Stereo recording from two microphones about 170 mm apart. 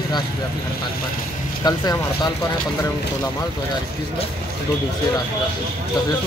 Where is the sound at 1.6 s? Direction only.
25° left (ahead or behind).